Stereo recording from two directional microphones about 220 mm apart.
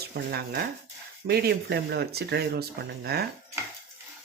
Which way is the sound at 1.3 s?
45° right (ahead or behind).